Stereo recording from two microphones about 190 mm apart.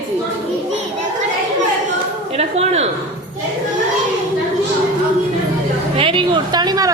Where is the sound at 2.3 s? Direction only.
35° right (ahead or behind).